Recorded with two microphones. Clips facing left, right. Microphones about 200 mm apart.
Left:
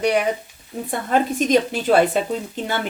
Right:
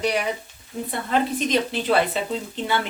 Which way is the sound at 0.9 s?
45° left (ahead or behind).